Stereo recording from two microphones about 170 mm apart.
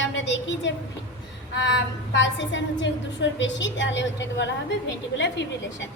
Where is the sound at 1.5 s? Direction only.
90° left.